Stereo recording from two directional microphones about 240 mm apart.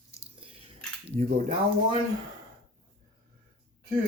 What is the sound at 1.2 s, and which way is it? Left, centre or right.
Speech, right.